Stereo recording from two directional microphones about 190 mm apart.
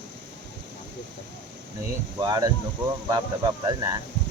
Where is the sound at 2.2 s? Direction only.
20° right (ahead or behind).